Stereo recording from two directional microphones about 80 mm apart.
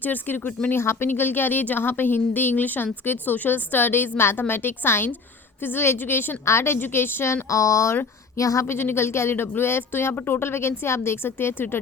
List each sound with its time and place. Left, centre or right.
0.0 s a woman's voice: left
7.5 s speech: left
8.6 s a woman's voice: left